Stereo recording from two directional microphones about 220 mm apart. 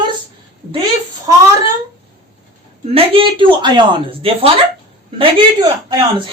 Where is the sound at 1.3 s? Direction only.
15° right (ahead or behind).